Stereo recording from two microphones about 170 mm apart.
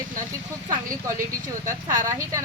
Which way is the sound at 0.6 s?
20° right (ahead or behind).